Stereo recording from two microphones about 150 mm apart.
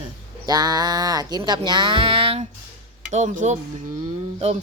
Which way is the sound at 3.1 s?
55° right (ahead or behind).